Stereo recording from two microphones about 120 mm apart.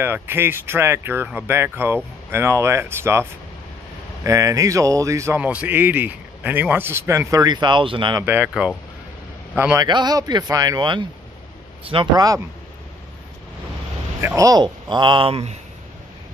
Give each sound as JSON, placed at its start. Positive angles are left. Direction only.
{"t": 0.0, "sound": "a man's voice", "side_deg": -20}
{"t": 5.4, "sound": "a man's voice", "side_deg": -10}
{"t": 8.3, "sound": "speech", "side_deg": -10}
{"t": 9.8, "sound": "speech", "side_deg": -35}
{"t": 14.2, "sound": "speech", "side_deg": -30}